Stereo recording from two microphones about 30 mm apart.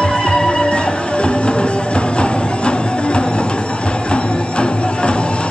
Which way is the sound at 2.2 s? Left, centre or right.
Left.